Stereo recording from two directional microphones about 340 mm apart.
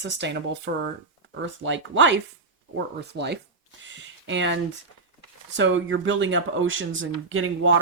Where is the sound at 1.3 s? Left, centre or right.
Right.